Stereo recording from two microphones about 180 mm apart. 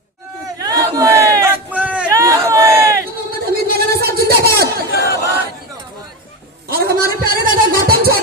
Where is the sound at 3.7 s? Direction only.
60° right (ahead or behind).